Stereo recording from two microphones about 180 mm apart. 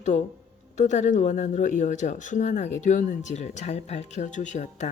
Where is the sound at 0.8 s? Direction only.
40° left (ahead or behind).